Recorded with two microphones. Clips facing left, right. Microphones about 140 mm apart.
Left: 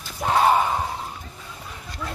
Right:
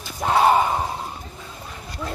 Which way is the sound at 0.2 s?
10° right (ahead or behind).